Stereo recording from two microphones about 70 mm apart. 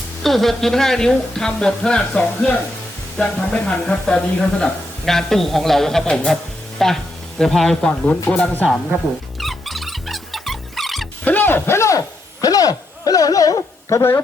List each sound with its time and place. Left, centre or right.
0.2 s speech: centre
7.9 s speech: centre
9.4 s music: centre
11.3 s a sound: left